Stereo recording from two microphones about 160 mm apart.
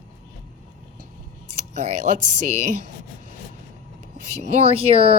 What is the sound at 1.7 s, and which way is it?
Speech, 45° right (ahead or behind).